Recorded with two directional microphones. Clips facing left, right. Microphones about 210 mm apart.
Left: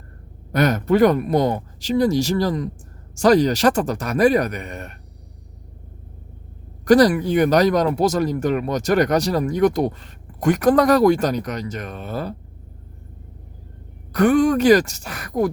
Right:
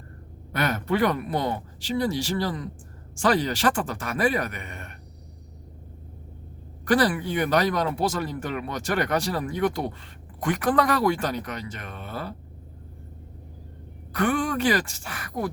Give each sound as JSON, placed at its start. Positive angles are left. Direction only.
{"t": 0.5, "sound": "speech", "side_deg": 40}
{"t": 6.8, "sound": "speech", "side_deg": 40}
{"t": 14.1, "sound": "speech", "side_deg": 40}